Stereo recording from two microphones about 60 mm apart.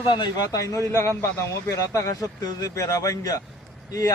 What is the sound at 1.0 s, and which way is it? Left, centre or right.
Speech, left.